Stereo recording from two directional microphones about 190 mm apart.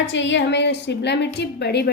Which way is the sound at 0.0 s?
70° left (ahead or behind).